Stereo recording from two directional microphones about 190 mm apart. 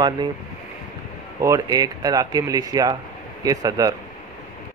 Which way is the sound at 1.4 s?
20° right (ahead or behind).